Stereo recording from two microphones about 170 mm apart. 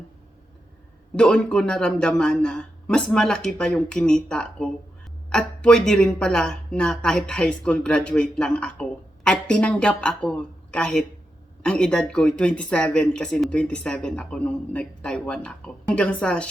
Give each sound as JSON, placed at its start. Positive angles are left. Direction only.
{"t": 1.1, "sound": "speech", "side_deg": 5}